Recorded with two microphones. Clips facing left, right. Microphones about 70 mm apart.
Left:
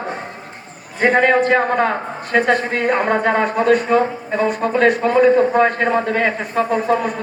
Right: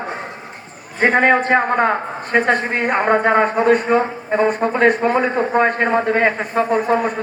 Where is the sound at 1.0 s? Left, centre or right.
Right.